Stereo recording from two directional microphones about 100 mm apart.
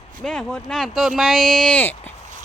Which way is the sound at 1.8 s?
20° left (ahead or behind).